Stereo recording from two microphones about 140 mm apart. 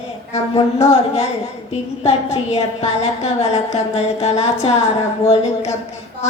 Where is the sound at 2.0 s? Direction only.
50° left (ahead or behind).